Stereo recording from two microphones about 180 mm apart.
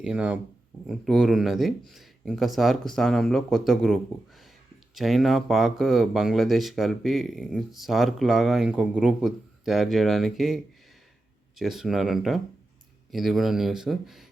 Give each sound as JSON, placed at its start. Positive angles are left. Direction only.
{"t": 0.0, "sound": "speech", "side_deg": -5}